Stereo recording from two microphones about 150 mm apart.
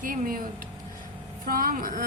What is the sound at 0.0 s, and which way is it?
Speech, 70° right (ahead or behind).